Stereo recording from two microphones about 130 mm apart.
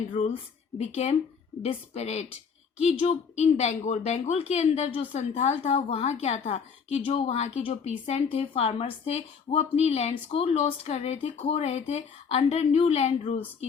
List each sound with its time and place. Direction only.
0.1 s a woman's voice: 60° left (ahead or behind)
1.6 s a woman's voice: 55° left (ahead or behind)